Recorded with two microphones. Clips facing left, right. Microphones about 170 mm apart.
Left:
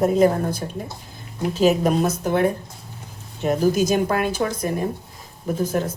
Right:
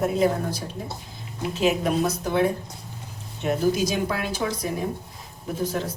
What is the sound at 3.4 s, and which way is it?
Speech, 45° left (ahead or behind).